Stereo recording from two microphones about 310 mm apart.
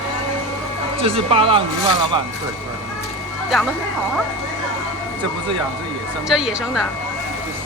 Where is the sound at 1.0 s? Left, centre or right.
Centre.